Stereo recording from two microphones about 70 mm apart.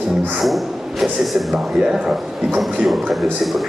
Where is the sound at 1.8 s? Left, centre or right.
Centre.